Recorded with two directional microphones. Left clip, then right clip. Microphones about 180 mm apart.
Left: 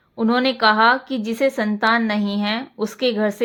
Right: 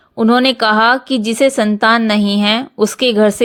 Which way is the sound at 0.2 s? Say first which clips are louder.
Right 6 dB; 40° right (ahead or behind).